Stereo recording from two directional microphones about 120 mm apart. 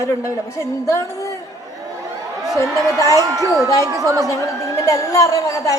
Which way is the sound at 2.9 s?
25° left (ahead or behind).